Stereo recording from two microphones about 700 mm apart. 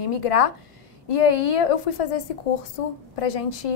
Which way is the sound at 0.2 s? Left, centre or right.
Left.